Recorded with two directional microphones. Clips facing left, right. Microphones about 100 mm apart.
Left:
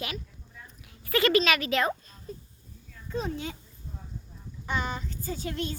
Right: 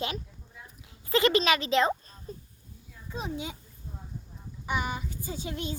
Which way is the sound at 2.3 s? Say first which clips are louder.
Left 1 dB; 35° right (ahead or behind).